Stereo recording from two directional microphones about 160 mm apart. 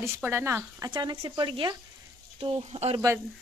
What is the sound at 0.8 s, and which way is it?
Speech, 25° right (ahead or behind).